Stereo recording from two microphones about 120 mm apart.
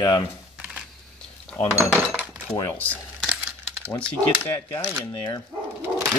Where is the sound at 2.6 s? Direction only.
15° left (ahead or behind).